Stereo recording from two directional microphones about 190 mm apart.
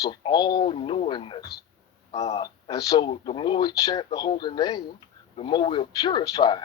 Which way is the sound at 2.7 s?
20° left (ahead or behind).